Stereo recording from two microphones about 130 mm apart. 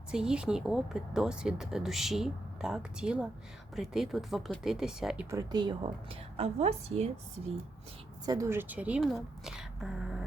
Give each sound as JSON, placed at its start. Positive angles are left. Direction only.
{"t": 0.1, "sound": "speech", "side_deg": -5}
{"t": 5.3, "sound": "speech", "side_deg": -30}
{"t": 6.3, "sound": "a woman's voice", "side_deg": -55}
{"t": 8.3, "sound": "speech", "side_deg": -20}
{"t": 9.0, "sound": "a woman's voice", "side_deg": 0}